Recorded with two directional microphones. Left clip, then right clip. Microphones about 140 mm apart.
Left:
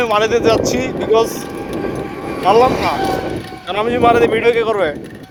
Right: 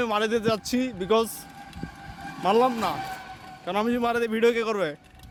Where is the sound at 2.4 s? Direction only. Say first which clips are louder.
Left 10 dB; 35° right (ahead or behind); by 4.4 s 20° right (ahead or behind).